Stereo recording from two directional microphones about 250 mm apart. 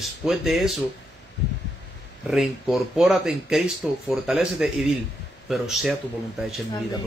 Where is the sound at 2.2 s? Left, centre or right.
Centre.